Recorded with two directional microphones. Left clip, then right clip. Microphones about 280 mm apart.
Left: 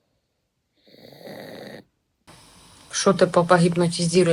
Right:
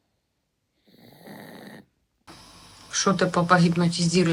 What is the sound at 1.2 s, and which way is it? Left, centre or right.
Dog, left.